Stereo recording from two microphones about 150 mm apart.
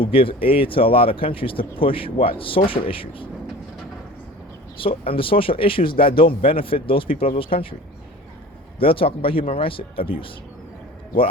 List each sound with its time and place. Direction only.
0.0 s speech: 35° left (ahead or behind)
4.8 s speech: 35° left (ahead or behind)
5.9 s speech: 80° left
6.1 s speech: 35° left (ahead or behind)
8.8 s speech: 35° left (ahead or behind)